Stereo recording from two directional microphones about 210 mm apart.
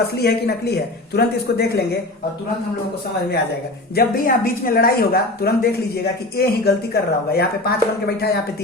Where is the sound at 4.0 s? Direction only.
45° left (ahead or behind).